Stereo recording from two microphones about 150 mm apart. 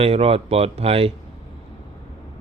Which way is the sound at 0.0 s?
40° right (ahead or behind).